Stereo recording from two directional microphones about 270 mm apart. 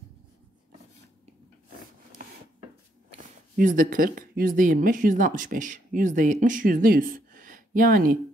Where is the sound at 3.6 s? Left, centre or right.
Right.